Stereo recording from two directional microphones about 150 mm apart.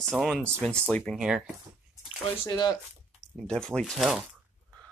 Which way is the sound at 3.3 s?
5° left (ahead or behind).